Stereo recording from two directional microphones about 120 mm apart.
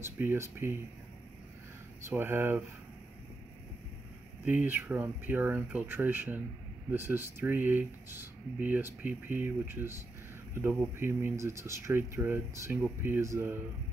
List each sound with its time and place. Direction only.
0.0 s speech: 20° right (ahead or behind)
2.0 s speech: 20° right (ahead or behind)
4.5 s speech: 15° right (ahead or behind)